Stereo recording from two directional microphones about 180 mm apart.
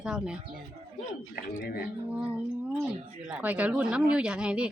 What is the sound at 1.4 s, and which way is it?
Speech, 55° left (ahead or behind).